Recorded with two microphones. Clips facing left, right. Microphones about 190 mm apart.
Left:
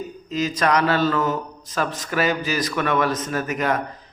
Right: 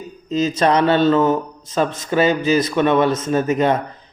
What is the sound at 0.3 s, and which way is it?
A man's voice, 25° right (ahead or behind).